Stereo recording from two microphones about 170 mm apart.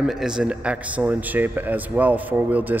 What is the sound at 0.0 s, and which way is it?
A man's voice, 5° right (ahead or behind).